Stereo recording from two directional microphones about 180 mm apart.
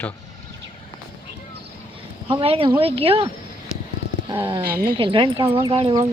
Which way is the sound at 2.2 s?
30° right (ahead or behind).